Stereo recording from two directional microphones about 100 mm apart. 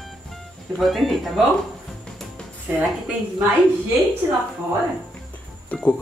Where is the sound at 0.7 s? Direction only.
Centre (ahead or behind).